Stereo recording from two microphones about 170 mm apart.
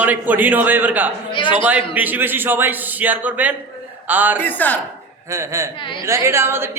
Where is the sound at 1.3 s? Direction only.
30° left (ahead or behind).